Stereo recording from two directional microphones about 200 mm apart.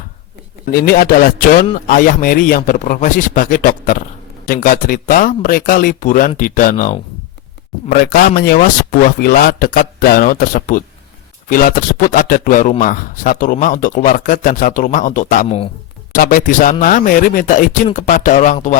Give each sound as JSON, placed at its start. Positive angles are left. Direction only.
{"t": 0.7, "sound": "speech", "side_deg": 50}
{"t": 15.4, "sound": "speech", "side_deg": 30}
{"t": 16.1, "sound": "speech", "side_deg": 45}